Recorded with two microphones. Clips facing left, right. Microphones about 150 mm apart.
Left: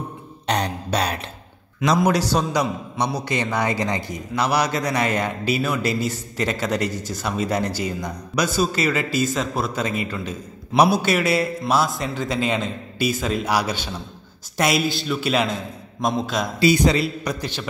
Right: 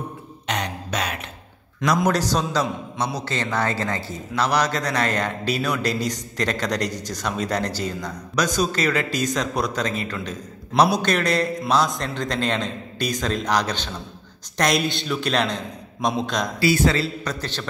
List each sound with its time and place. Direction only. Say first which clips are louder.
0.5 s throat clearing: left 4 dB; 35° left (ahead or behind)
2.0 s a man's voice: left 2 dB; 10° left (ahead or behind)
16.5 s a man's voice: left 3 dB; 20° left (ahead or behind)